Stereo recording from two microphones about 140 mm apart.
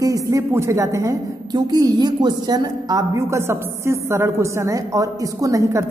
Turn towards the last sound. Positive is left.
turn(degrees=-20)  # may be behind; listen again after turning